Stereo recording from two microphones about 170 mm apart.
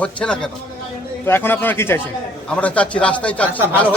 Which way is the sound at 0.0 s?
5° left (ahead or behind).